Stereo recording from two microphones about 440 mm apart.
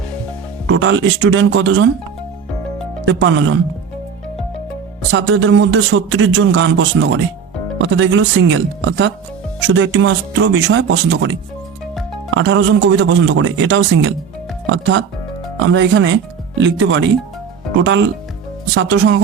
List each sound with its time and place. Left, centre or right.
0.7 s speech: right
3.1 s speech: right
5.1 s speech: right